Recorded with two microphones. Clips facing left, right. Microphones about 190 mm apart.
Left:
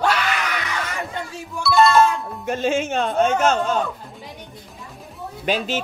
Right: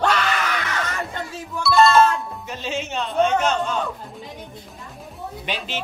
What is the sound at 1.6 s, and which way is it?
Music, centre (ahead or behind).